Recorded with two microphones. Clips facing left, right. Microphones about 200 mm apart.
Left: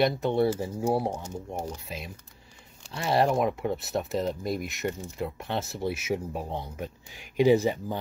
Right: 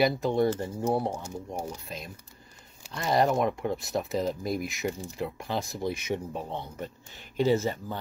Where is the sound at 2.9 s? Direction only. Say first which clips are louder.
Even; 5° left (ahead or behind).